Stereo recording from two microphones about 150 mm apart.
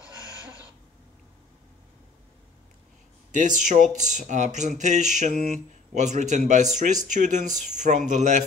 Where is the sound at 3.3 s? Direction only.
55° right (ahead or behind).